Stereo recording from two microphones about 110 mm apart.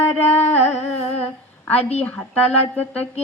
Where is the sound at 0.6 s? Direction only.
80° left.